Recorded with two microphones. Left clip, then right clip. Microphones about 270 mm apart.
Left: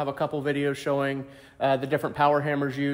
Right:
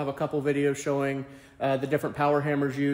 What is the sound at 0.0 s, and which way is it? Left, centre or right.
Speech, centre.